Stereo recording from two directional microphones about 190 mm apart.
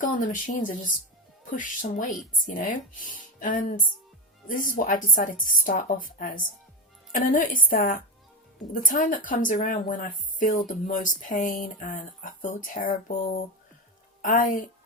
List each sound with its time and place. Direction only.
0.0 s a woman's voice: 45° left (ahead or behind)